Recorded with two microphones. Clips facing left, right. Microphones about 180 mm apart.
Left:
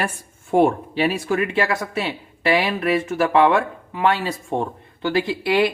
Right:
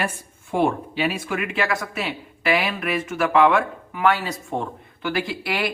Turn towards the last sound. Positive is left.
turn(degrees=25)  # may be behind; listen again after turning